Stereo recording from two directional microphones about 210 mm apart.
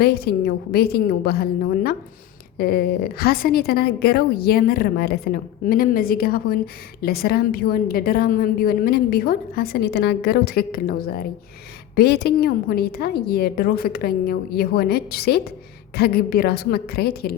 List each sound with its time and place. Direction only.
0.0 s a woman's voice: 45° left (ahead or behind)